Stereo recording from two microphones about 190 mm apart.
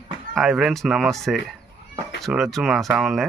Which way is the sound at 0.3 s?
Centre (ahead or behind).